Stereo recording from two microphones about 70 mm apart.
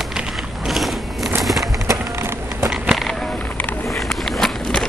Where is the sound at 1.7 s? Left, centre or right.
Right.